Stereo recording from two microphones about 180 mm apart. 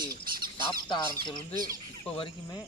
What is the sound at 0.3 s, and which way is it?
Squawk, 50° right (ahead or behind).